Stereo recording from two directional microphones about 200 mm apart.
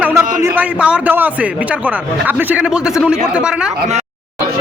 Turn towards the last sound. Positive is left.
turn(degrees=-5)  # may be behind; listen again after turning